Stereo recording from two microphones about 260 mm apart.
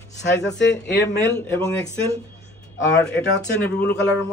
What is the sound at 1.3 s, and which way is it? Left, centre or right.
Speech, centre.